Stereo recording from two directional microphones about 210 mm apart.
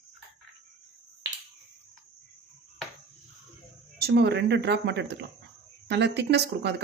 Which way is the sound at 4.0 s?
50° right (ahead or behind).